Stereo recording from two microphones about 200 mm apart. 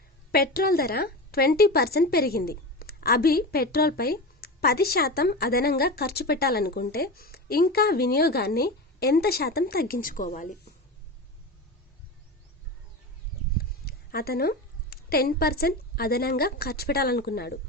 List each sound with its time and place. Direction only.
0.3 s a woman's voice: 50° left (ahead or behind)
13.6 s a woman's voice: 50° left (ahead or behind)